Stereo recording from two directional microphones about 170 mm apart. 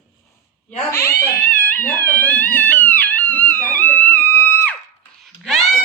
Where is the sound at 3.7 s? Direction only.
10° left (ahead or behind).